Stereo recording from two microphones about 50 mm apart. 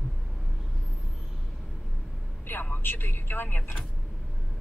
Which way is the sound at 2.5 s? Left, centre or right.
Left.